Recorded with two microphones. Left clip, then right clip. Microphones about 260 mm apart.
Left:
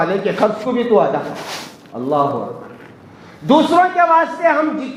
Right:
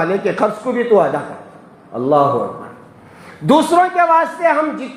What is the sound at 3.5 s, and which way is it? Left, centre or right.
A man's voice, right.